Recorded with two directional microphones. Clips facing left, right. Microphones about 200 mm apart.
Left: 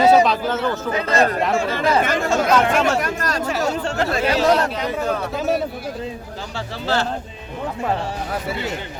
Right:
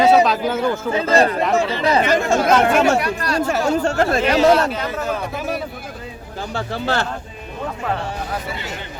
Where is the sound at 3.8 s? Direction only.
45° right (ahead or behind).